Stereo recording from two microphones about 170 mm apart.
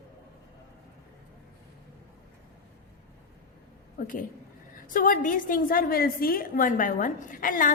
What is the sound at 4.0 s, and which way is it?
A woman's voice, 55° left (ahead or behind).